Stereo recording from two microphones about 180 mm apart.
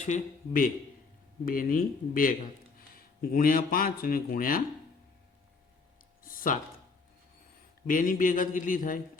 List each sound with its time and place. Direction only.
0.0 s a man's voice: 45° left (ahead or behind)
6.2 s speech: 50° left (ahead or behind)
7.9 s a man's voice: 50° left (ahead or behind)